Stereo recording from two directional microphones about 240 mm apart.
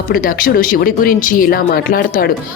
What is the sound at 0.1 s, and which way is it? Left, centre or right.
Speech, left.